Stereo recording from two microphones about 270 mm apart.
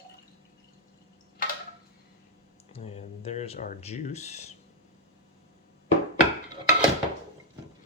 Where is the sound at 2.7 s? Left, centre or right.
Left.